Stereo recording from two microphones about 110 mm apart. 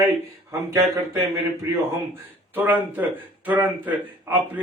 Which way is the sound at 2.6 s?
15° right (ahead or behind).